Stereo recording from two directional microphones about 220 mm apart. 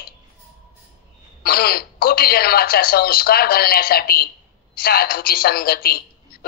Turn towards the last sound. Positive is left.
turn(degrees=45)  # may be behind; listen again after turning